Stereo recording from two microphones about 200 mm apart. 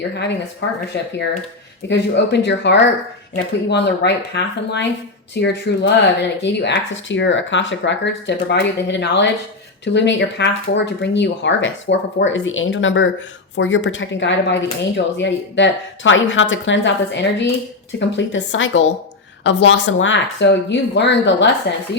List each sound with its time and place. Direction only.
0.1 s a woman's voice: 60° left (ahead or behind)